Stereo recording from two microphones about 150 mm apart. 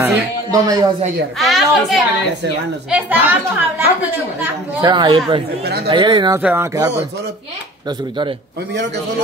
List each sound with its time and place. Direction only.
0.0 s speech: 20° right (ahead or behind)
1.4 s a sound: centre (ahead or behind)
2.9 s a woman's voice: 10° right (ahead or behind)
4.8 s speech: 30° right (ahead or behind)
6.4 s a woman's voice: 15° right (ahead or behind)